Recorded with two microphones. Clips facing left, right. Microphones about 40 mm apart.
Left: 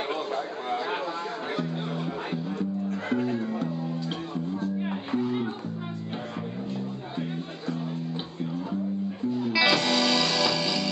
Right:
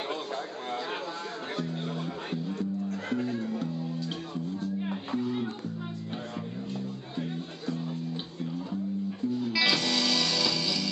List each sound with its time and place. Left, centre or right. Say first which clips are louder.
2.9 s music: left 4 dB; left
4.6 s music: left 3 dB; left
9.4 s music: left 5 dB; centre